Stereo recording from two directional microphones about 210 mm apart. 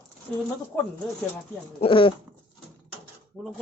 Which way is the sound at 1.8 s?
25° left (ahead or behind).